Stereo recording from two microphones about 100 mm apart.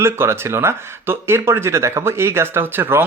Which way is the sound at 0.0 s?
25° right (ahead or behind).